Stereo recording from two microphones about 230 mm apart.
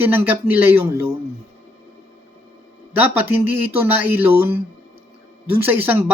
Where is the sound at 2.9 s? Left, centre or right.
Centre.